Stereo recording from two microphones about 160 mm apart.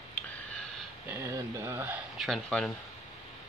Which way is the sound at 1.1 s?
15° right (ahead or behind).